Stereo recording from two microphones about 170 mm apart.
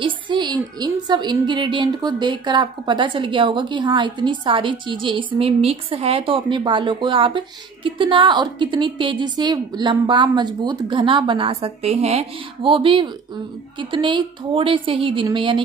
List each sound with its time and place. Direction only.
0.0 s a woman's voice: 25° right (ahead or behind)